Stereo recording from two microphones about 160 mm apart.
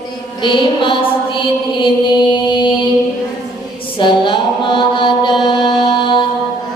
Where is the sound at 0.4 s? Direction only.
30° left (ahead or behind).